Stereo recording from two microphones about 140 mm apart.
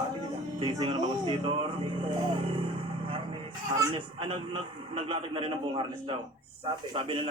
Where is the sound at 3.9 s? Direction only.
40° right (ahead or behind).